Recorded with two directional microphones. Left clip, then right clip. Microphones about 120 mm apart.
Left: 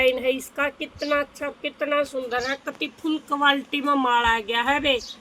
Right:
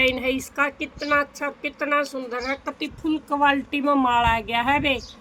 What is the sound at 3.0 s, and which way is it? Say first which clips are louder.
Speech: right 1 dB; 75° right (ahead or behind).